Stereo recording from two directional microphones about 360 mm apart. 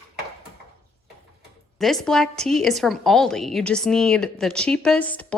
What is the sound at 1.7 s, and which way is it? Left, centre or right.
A woman's voice, centre.